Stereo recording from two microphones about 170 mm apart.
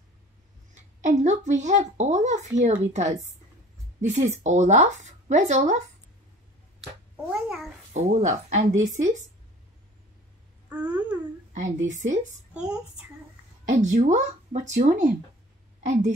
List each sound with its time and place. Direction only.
1.0 s speech: 45° right (ahead or behind)
7.9 s speech: 40° right (ahead or behind)
10.7 s babbling: 10° right (ahead or behind)
11.5 s speech: 45° right (ahead or behind)
12.5 s a child's voice: 5° right (ahead or behind)
13.7 s a woman's voice: 45° right (ahead or behind)